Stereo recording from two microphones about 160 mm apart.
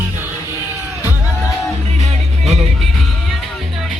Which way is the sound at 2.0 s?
45° right (ahead or behind).